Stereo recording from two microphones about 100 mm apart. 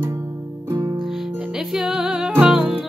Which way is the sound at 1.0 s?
5° right (ahead or behind).